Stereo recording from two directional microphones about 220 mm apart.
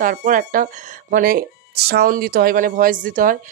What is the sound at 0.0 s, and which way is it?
Speech, 40° right (ahead or behind).